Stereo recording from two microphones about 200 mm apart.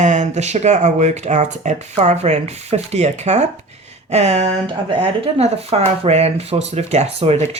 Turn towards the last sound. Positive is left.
turn(degrees=-30)  # may be behind; listen again after turning